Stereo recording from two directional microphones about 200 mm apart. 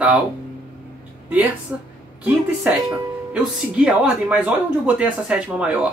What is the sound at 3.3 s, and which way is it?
Speech, 5° right (ahead or behind).